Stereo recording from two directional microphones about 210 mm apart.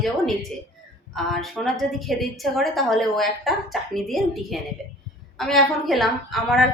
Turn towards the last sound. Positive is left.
turn(degrees=0)  # may be behind; listen again after turning